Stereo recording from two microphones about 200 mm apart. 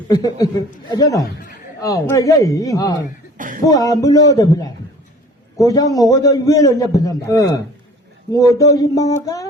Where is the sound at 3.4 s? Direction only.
40° right (ahead or behind).